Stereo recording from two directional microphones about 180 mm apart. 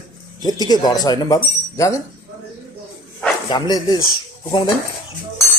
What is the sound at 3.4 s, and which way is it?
Speech, 25° left (ahead or behind).